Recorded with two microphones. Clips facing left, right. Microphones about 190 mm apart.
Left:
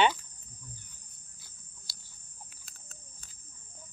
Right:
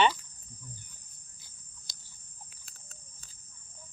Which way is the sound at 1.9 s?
20° right (ahead or behind).